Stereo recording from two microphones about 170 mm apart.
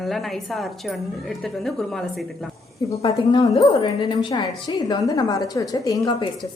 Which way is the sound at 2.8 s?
35° left (ahead or behind).